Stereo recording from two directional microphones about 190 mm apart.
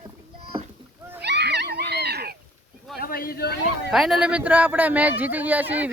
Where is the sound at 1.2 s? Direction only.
60° right (ahead or behind).